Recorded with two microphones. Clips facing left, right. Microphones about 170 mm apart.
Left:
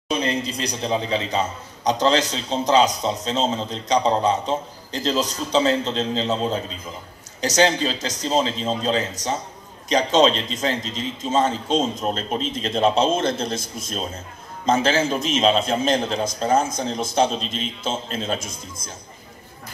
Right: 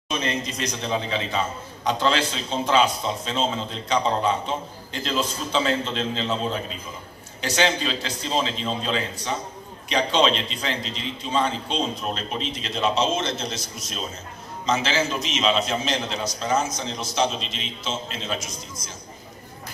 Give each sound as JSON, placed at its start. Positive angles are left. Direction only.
{"t": 0.1, "sound": "a man's voice", "side_deg": 35}
{"t": 5.7, "sound": "a man's voice", "side_deg": 20}
{"t": 7.4, "sound": "a man's voice", "side_deg": 40}